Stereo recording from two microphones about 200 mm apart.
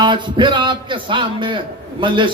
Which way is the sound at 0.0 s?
25° right (ahead or behind).